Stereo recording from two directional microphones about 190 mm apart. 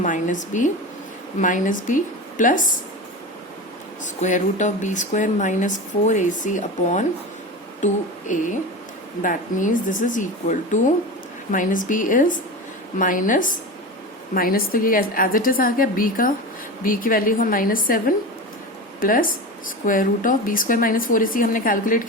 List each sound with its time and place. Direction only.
0.0 s speech: 40° left (ahead or behind)
4.0 s speech: 40° left (ahead or behind)
8.3 s speech: 40° left (ahead or behind)